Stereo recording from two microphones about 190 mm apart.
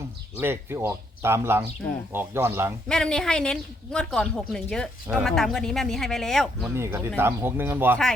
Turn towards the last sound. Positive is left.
turn(degrees=-10)  # may be behind; listen again after turning